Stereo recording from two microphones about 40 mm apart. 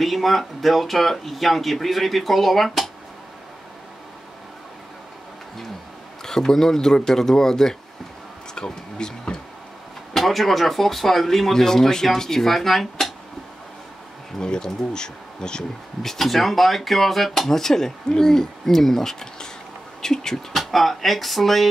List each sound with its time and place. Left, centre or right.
0.0 s speech: centre
6.2 s speech: centre
10.1 s speech: centre
14.4 s speech: centre
16.0 s speech: centre
20.5 s speech: centre